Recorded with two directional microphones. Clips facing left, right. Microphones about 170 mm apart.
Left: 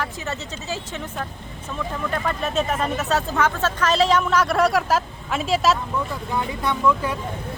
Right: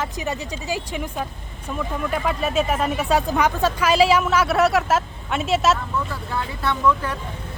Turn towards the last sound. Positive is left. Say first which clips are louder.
# even
turn(degrees=10)  # may be behind; listen again after turning